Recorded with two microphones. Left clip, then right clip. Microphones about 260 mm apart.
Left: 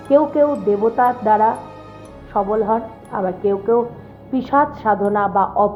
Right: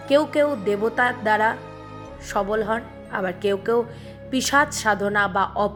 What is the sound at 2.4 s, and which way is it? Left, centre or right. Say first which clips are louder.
Speech: left 5 dB; right.